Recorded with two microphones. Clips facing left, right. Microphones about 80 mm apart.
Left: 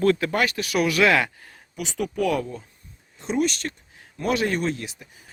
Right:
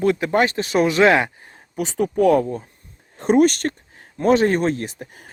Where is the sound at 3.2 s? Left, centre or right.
Right.